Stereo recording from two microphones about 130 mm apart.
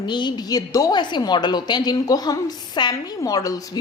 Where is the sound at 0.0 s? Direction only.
35° left (ahead or behind).